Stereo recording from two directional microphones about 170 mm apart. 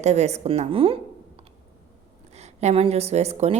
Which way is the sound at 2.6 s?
40° right (ahead or behind).